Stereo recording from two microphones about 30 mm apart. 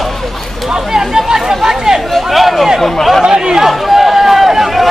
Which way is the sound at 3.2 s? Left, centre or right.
Right.